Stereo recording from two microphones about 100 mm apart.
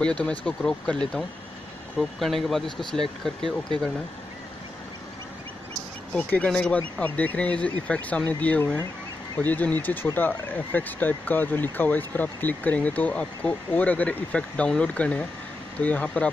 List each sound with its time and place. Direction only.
0.0 s speech: 10° left (ahead or behind)
6.1 s speech: 15° left (ahead or behind)